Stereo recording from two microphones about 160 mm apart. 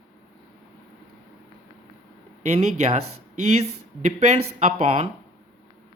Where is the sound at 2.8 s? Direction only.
40° right (ahead or behind).